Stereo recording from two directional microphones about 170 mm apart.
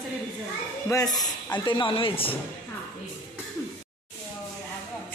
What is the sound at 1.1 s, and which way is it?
Speech, 25° left (ahead or behind).